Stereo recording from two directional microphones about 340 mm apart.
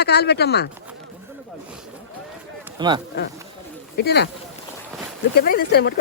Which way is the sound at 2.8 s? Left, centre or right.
Centre.